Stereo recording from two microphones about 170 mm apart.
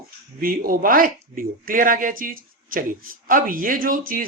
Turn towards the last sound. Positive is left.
turn(degrees=-55)  # may be behind; listen again after turning